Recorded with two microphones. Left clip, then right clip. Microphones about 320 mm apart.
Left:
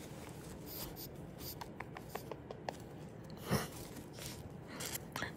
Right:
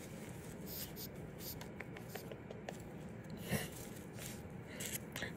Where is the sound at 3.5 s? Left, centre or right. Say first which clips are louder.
Left 4 dB; left.